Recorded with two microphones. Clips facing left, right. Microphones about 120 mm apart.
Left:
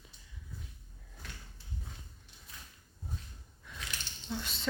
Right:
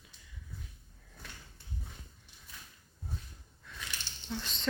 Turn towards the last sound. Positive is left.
turn(degrees=5)  # may be behind; listen again after turning